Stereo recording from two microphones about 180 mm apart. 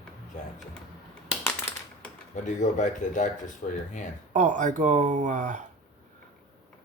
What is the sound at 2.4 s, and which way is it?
Speech, 45° left (ahead or behind).